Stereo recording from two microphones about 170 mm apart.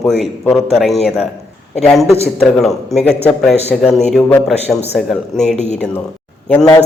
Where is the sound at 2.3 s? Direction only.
Centre (ahead or behind).